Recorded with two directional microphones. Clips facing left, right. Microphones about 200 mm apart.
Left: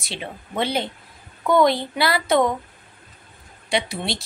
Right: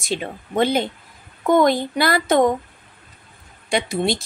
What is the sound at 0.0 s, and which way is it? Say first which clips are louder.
A woman's voice: right 7 dB; 45° right (ahead or behind).